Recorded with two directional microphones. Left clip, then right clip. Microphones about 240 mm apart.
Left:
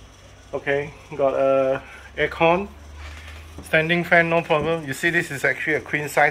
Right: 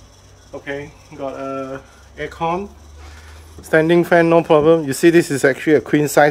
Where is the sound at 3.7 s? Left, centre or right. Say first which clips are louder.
Right 5 dB; right.